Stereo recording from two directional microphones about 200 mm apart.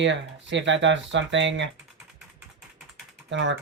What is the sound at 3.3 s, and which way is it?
Speech, 65° right (ahead or behind).